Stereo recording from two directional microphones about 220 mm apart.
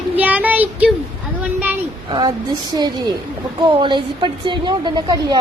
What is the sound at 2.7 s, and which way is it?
A woman's voice, 20° right (ahead or behind).